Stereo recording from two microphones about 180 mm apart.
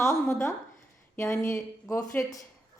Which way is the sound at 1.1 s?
15° left (ahead or behind).